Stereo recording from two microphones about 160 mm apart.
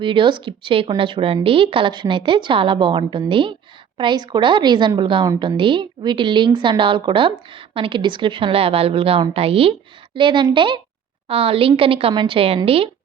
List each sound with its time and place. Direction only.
0.0 s a woman's voice: 30° right (ahead or behind)